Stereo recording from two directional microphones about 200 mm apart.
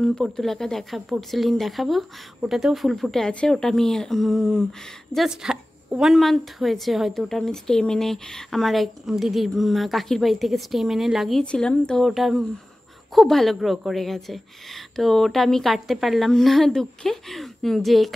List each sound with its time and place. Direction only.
0.0 s a woman's voice: centre (ahead or behind)